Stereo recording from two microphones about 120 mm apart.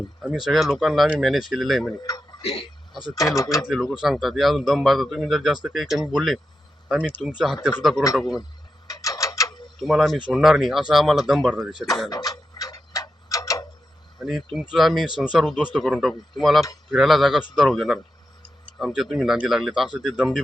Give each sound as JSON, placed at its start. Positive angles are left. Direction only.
{"t": 0.3, "sound": "speech", "side_deg": 0}
{"t": 2.0, "sound": "tick-tock", "side_deg": 30}
{"t": 2.4, "sound": "speech", "side_deg": 55}
{"t": 3.2, "sound": "speech", "side_deg": 30}
{"t": 3.7, "sound": "speech", "side_deg": 0}
{"t": 8.9, "sound": "a sound", "side_deg": 25}
{"t": 9.8, "sound": "speech", "side_deg": 0}
{"t": 12.1, "sound": "tick-tock", "side_deg": 30}
{"t": 14.2, "sound": "speech", "side_deg": 0}